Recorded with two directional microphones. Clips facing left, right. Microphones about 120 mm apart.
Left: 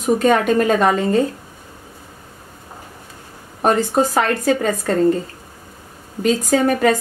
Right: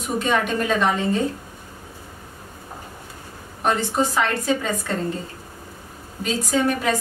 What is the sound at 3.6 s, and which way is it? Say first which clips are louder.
A woman's voice: left 5 dB; 45° left (ahead or behind).